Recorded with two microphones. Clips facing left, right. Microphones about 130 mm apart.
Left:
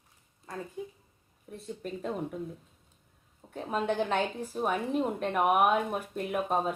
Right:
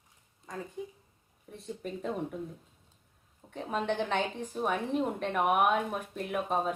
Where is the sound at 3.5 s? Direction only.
5° left (ahead or behind).